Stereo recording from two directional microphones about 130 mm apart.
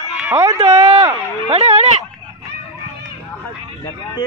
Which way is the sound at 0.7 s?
50° right (ahead or behind).